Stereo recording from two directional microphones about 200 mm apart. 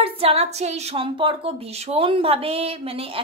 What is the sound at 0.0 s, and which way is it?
Speech, 30° right (ahead or behind).